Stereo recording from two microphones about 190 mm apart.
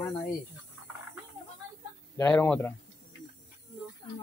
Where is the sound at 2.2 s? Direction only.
10° left (ahead or behind).